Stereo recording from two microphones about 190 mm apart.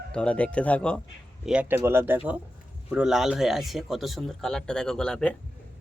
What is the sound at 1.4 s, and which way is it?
A man's voice, 5° right (ahead or behind).